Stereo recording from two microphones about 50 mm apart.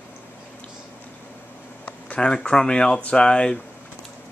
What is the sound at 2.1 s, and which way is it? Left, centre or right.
Speech, centre.